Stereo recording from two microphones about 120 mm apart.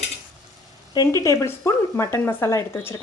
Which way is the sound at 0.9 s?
30° left (ahead or behind).